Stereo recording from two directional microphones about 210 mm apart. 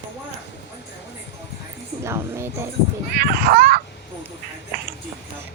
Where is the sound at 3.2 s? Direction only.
45° right (ahead or behind).